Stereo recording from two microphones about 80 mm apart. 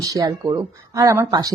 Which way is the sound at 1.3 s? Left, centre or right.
Right.